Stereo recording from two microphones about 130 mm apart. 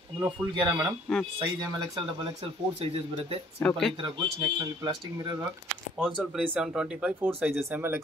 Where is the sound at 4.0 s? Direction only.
35° right (ahead or behind).